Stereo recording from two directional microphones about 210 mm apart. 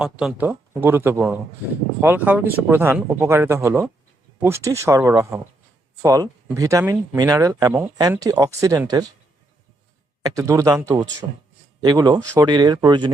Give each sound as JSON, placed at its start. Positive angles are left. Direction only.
{"t": 0.0, "sound": "speech", "side_deg": -5}
{"t": 10.2, "sound": "speech", "side_deg": -15}